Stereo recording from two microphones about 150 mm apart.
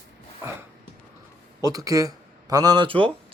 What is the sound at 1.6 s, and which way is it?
A man's voice, 25° right (ahead or behind).